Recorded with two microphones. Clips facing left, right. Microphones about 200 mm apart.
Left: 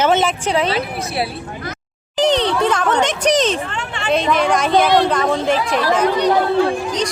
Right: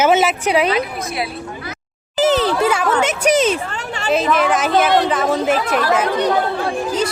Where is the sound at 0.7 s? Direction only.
30° left (ahead or behind).